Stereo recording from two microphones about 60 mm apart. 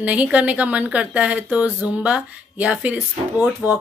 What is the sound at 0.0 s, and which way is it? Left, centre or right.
Speech, right.